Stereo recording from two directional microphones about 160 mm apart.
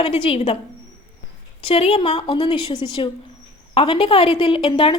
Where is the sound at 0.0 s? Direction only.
35° left (ahead or behind).